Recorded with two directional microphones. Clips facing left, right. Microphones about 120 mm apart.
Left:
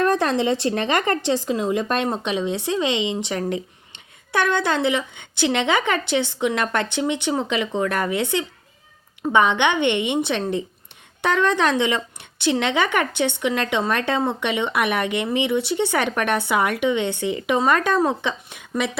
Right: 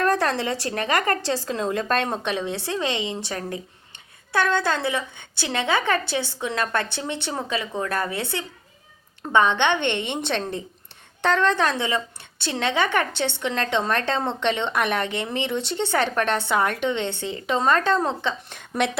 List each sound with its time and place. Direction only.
0.0 s a woman's voice: 20° left (ahead or behind)